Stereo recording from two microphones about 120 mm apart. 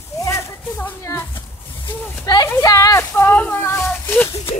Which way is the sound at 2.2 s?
35° left (ahead or behind).